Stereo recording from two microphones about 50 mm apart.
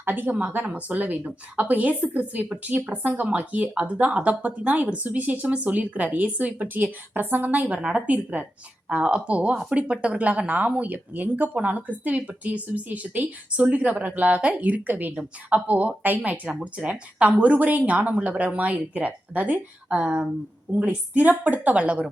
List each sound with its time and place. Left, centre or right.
0.0 s speech: right
7.8 s speech: right
16.5 s speech: right